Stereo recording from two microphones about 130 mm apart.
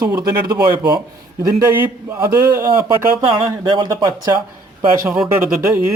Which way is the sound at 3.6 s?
35° right (ahead or behind).